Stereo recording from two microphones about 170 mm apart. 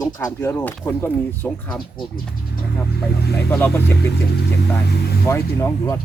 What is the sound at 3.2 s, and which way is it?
Speech, 70° left (ahead or behind).